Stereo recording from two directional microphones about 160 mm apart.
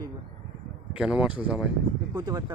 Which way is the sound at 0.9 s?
5° right (ahead or behind).